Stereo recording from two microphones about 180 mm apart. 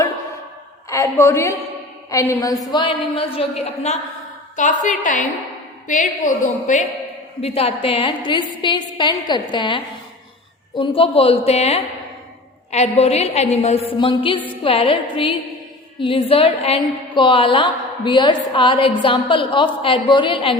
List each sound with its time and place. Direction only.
0.9 s a woman's voice: 15° left (ahead or behind); by 6.8 s 45° left (ahead or behind)
7.4 s a woman's voice: 35° left (ahead or behind)